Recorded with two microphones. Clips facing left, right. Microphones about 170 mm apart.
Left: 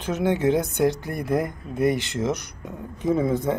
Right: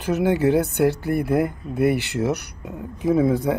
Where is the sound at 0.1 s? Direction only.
5° right (ahead or behind).